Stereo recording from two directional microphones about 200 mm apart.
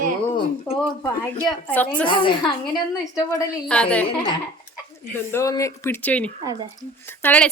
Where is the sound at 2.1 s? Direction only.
25° left (ahead or behind).